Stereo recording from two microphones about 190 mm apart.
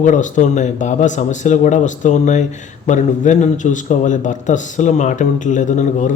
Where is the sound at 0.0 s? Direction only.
40° left (ahead or behind).